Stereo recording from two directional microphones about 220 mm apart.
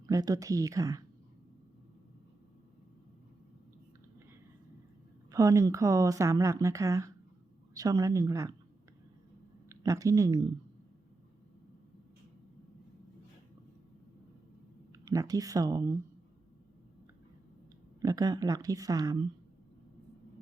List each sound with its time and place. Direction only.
0.0 s speech: 15° right (ahead or behind)
5.3 s speech: 15° right (ahead or behind)
9.6 s speech: 15° right (ahead or behind)
15.0 s speech: 15° right (ahead or behind)
18.0 s speech: 15° right (ahead or behind)